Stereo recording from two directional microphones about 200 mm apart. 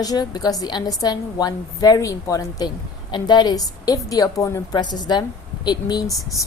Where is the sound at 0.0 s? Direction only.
20° left (ahead or behind).